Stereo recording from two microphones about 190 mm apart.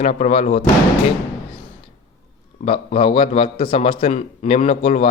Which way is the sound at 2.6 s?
35° left (ahead or behind).